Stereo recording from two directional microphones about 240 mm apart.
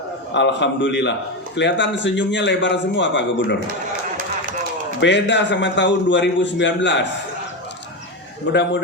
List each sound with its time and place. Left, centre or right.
0.3 s a man's voice: left
4.9 s a man's voice: left
8.5 s a man's voice: left